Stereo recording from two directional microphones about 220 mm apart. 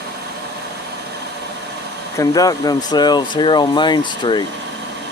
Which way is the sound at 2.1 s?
15° left (ahead or behind).